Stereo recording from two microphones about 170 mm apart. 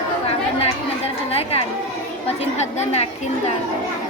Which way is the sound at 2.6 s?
40° left (ahead or behind).